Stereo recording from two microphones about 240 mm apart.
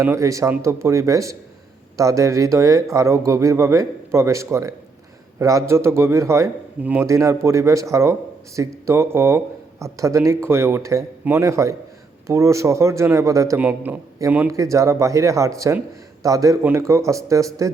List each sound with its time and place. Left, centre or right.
0.0 s speech: centre